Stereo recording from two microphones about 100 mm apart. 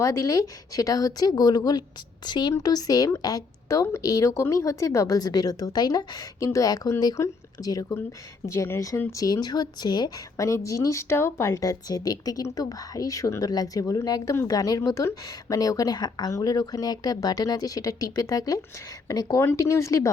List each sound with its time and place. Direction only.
0.0 s speech: 35° left (ahead or behind)
10.4 s speech: 30° left (ahead or behind)